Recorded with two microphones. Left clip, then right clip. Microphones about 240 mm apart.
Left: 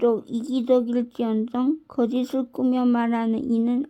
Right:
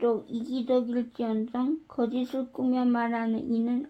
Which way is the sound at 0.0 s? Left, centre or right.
Left.